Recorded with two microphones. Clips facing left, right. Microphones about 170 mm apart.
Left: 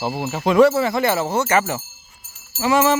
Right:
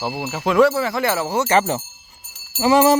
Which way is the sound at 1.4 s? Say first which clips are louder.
Right 1 dB; 25° right (ahead or behind).